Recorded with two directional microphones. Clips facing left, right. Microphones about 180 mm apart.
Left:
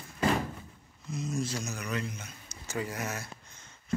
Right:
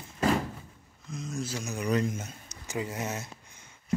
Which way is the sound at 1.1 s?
Centre (ahead or behind).